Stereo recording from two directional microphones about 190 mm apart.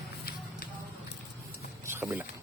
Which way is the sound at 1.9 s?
10° right (ahead or behind).